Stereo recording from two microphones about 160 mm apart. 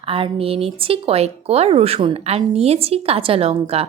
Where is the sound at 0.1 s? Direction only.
35° right (ahead or behind).